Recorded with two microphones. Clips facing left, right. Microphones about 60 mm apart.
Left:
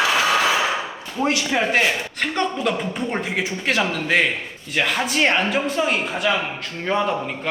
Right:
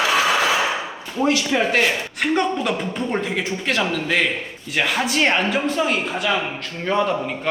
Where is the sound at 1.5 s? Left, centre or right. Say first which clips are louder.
Right 1 dB; centre.